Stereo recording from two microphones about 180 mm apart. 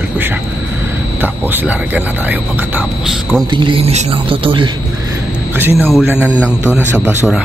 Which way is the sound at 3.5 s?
25° right (ahead or behind).